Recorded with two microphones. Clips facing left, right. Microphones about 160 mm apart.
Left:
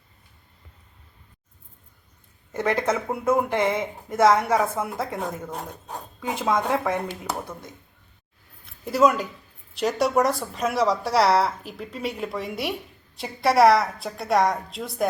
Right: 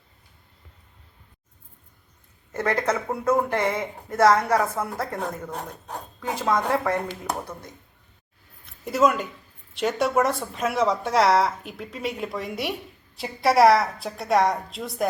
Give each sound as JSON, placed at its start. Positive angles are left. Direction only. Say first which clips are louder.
{"t": 2.6, "sound": "speech", "louder": "left 1 dB", "side_deg": 15}
{"t": 3.6, "sound": "speech", "louder": "left 2 dB", "side_deg": 20}
{"t": 5.2, "sound": "a woman's voice", "louder": "even", "side_deg": 5}
{"t": 6.7, "sound": "a woman's voice", "louder": "right 1 dB", "side_deg": 0}
{"t": 8.9, "sound": "a woman's voice", "louder": "left 1 dB", "side_deg": 0}